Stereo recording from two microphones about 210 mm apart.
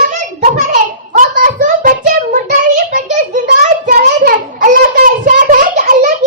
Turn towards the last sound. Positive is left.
turn(degrees=-35)  # may be behind; listen again after turning